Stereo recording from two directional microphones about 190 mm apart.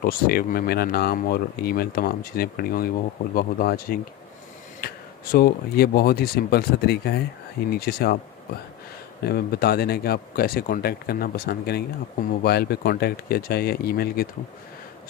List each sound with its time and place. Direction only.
0.0 s speech: 50° left (ahead or behind)
9.2 s speech: 55° left (ahead or behind)